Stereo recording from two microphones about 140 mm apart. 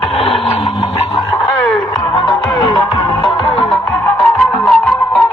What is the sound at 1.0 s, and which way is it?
Radio, 35° left (ahead or behind).